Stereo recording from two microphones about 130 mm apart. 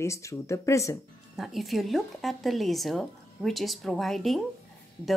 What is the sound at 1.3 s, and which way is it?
Speech, centre (ahead or behind).